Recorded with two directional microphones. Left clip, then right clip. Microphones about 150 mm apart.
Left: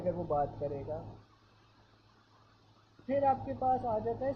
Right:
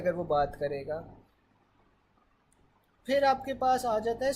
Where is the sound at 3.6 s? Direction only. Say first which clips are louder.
Right 5 dB; 45° right (ahead or behind).